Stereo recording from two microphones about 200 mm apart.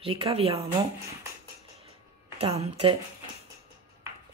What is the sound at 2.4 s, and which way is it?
Speech, 30° right (ahead or behind).